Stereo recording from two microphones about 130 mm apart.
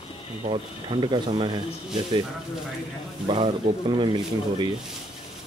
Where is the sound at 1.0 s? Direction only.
35° right (ahead or behind).